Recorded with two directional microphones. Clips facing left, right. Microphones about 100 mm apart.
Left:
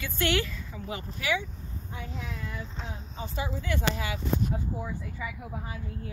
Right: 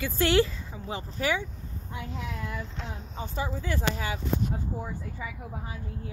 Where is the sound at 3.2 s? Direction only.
35° right (ahead or behind).